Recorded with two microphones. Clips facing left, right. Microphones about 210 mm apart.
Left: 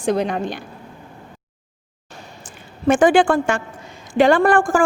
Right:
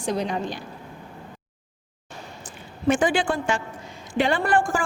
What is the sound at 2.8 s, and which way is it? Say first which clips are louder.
A woman's voice: left 7 dB; 50° left (ahead or behind).